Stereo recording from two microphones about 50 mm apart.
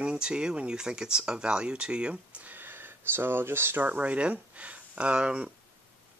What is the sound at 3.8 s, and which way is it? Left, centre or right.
Speech, right.